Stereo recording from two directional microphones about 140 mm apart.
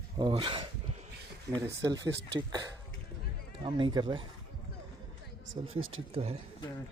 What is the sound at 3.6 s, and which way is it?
Speech, 35° right (ahead or behind).